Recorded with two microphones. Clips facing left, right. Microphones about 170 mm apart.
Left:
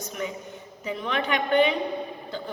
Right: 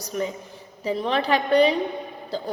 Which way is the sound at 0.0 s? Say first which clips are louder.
Right 5 dB; 35° right (ahead or behind).